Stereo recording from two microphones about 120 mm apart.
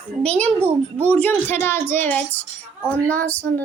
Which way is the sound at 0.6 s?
20° right (ahead or behind).